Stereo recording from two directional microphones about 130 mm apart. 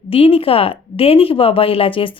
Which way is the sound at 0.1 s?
45° left (ahead or behind).